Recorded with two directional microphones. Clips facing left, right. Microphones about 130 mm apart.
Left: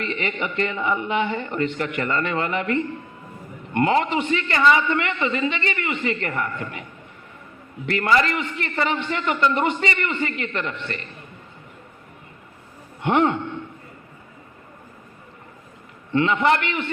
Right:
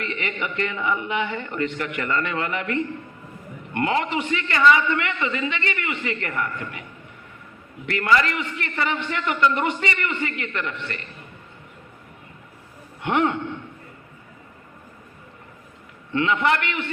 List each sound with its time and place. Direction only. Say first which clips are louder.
0.0 s a man's voice: left 2 dB; 30° left (ahead or behind)
3.8 s a man's voice: left 3 dB; 30° left (ahead or behind)
7.9 s a man's voice: left 1 dB; 30° left (ahead or behind)
13.1 s a man's voice: left 2 dB; 30° left (ahead or behind)
16.1 s a man's voice: left 2 dB; 30° left (ahead or behind)